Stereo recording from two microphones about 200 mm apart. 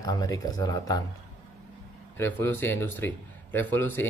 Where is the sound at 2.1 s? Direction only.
10° left (ahead or behind).